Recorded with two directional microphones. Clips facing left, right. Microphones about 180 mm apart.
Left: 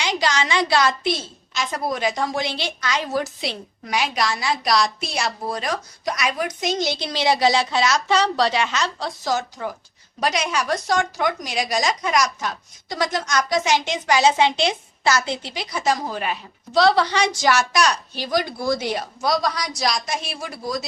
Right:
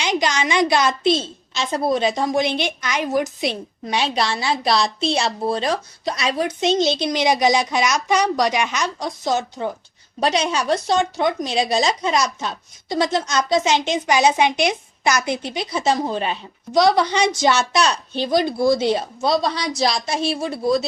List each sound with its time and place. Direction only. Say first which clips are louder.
0.0 s speech: right 2 dB; 20° right (ahead or behind)